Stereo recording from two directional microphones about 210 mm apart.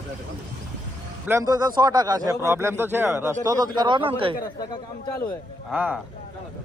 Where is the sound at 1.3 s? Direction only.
15° right (ahead or behind).